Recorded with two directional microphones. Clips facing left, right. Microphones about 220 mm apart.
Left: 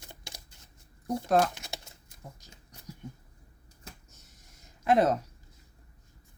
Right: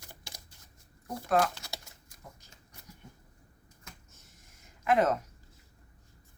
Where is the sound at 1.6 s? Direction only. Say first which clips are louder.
Left 2 dB; 25° left (ahead or behind).